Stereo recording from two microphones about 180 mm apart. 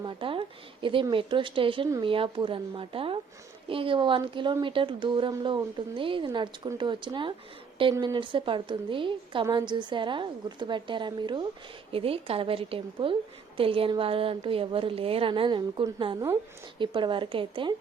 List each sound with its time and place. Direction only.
0.0 s a woman's voice: 30° right (ahead or behind)